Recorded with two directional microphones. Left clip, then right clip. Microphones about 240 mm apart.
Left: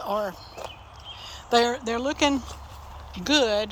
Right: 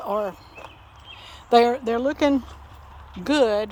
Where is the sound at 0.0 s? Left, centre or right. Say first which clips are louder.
Right 2 dB; right.